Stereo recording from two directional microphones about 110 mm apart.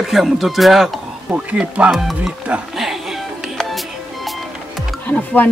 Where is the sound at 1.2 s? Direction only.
15° right (ahead or behind).